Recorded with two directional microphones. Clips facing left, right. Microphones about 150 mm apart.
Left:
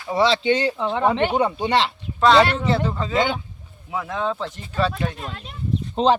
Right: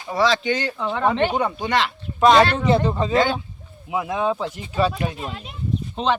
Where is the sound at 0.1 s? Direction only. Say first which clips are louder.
Left 2 dB; 25° left (ahead or behind).